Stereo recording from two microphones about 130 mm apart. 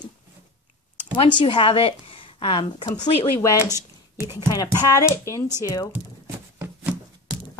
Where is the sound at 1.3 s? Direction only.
40° left (ahead or behind).